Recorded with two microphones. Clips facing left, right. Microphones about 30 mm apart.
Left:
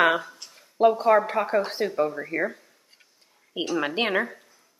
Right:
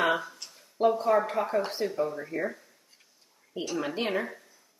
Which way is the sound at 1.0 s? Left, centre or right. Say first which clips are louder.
Left 5 dB; left.